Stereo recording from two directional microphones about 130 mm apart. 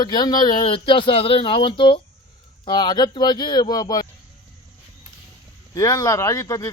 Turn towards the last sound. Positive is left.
turn(degrees=25)  # may be behind; listen again after turning